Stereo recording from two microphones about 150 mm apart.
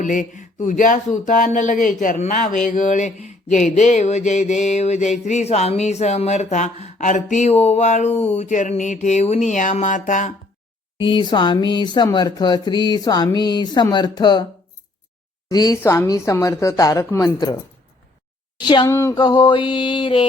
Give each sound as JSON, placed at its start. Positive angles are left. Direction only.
{"t": 0.0, "sound": "speech", "side_deg": 60}
{"t": 10.9, "sound": "speech", "side_deg": 30}
{"t": 15.4, "sound": "speech", "side_deg": 25}
{"t": 18.6, "sound": "speech", "side_deg": 30}
{"t": 18.9, "sound": "speech", "side_deg": 20}
{"t": 19.1, "sound": "mantra", "side_deg": 30}